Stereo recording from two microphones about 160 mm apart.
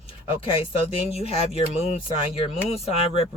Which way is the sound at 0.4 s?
35° left (ahead or behind).